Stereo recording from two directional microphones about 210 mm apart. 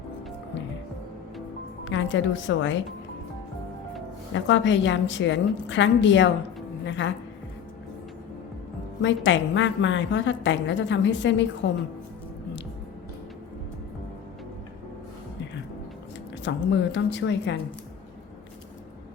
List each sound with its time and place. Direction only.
1.8 s a woman's voice: 60° left (ahead or behind)
4.4 s a woman's voice: 60° left (ahead or behind)
9.0 s a woman's voice: 60° left (ahead or behind)
16.4 s a woman's voice: 55° left (ahead or behind)